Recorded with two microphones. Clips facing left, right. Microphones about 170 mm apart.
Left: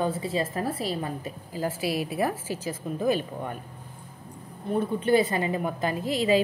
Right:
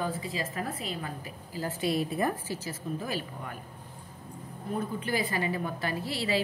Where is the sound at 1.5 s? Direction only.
10° left (ahead or behind).